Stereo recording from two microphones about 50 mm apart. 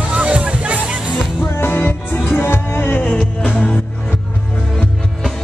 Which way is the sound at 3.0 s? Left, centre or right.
Centre.